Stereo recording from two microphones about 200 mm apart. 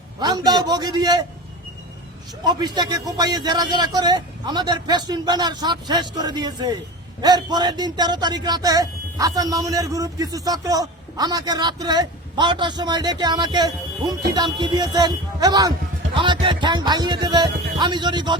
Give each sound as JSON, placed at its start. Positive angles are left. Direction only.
{"t": 0.2, "sound": "speech", "side_deg": -20}
{"t": 2.4, "sound": "speech", "side_deg": -20}